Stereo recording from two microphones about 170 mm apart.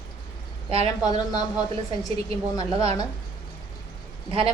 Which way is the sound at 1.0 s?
25° left (ahead or behind).